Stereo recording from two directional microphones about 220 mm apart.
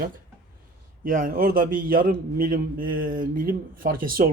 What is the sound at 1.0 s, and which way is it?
A man's voice, 40° right (ahead or behind).